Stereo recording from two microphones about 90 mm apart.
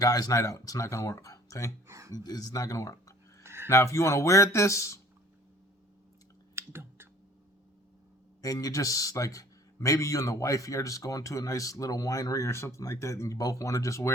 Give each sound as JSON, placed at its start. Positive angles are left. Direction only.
{"t": 0.0, "sound": "a man's voice", "side_deg": 40}
{"t": 1.9, "sound": "a sound", "side_deg": -35}
{"t": 2.1, "sound": "a man's voice", "side_deg": 45}
{"t": 3.4, "sound": "a sound", "side_deg": -30}
{"t": 3.7, "sound": "a man's voice", "side_deg": 35}
{"t": 6.6, "sound": "clicking", "side_deg": -25}
{"t": 8.4, "sound": "a man's voice", "side_deg": 40}